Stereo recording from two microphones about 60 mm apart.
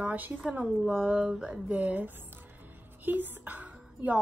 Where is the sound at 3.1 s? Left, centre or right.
Right.